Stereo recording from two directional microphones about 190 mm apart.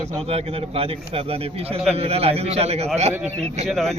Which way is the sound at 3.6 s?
Centre (ahead or behind).